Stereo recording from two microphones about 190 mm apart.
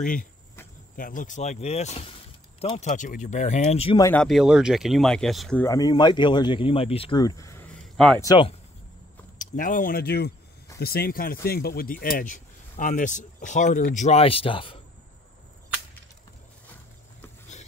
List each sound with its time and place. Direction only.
0.0 s speech: 45° left (ahead or behind)
4.0 s speech: 5° left (ahead or behind)
5.6 s speech: 20° left (ahead or behind)
7.7 s a sound: centre (ahead or behind)
8.2 s speech: 20° left (ahead or behind)
9.4 s speech: 45° left (ahead or behind); by 14.8 s 30° left (ahead or behind)